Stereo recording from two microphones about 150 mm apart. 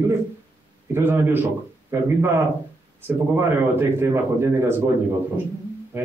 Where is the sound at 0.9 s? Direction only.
15° right (ahead or behind).